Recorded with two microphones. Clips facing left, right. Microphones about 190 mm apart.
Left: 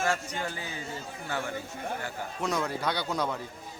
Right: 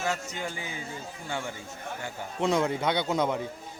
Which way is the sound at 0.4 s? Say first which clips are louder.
Right 1 dB; 15° right (ahead or behind).